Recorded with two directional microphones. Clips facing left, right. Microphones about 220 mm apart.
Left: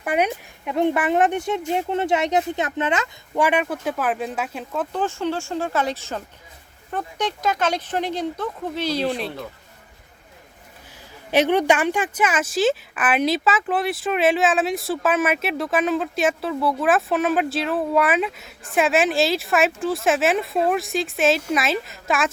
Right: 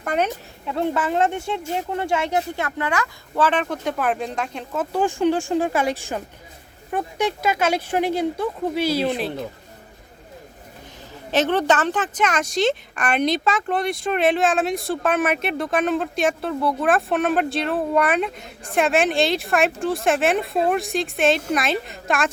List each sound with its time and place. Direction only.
0.0 s speech: 10° left (ahead or behind); by 9.0 s 10° right (ahead or behind)
11.3 s speech: 10° left (ahead or behind)